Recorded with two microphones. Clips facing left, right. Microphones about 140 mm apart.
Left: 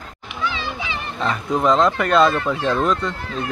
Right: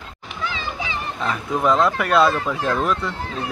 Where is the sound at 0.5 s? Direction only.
40° right (ahead or behind).